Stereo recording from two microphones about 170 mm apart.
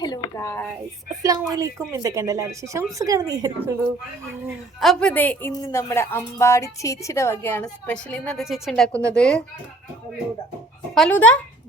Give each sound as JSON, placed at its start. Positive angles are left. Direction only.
{"t": 0.0, "sound": "speech", "side_deg": 25}
{"t": 1.2, "sound": "speech", "side_deg": -20}
{"t": 4.8, "sound": "speech", "side_deg": 5}
{"t": 10.9, "sound": "speech", "side_deg": 5}